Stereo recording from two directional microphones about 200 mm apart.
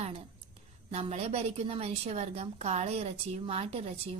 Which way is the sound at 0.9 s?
30° right (ahead or behind).